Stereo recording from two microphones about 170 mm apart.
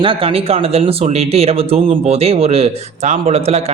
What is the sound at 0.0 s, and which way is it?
Speech, 35° right (ahead or behind).